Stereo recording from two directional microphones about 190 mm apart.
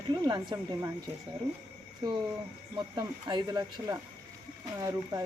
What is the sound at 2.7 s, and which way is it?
Speech, 20° right (ahead or behind).